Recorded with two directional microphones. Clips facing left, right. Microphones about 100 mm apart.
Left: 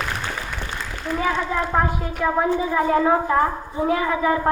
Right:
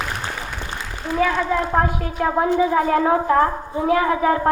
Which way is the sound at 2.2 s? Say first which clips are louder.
Right 3 dB; 60° right (ahead or behind).